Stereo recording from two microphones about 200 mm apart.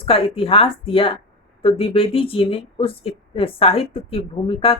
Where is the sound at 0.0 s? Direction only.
30° left (ahead or behind).